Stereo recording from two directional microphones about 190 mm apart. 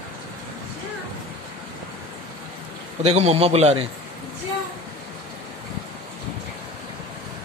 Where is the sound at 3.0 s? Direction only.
35° right (ahead or behind).